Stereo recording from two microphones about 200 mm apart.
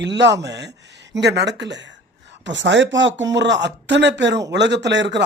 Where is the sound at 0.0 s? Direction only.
60° right (ahead or behind).